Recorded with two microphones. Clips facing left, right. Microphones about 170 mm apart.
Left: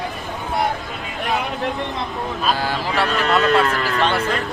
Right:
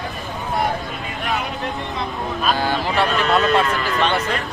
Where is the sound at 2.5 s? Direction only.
Centre (ahead or behind).